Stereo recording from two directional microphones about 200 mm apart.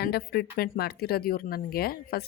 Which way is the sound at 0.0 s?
50° left (ahead or behind).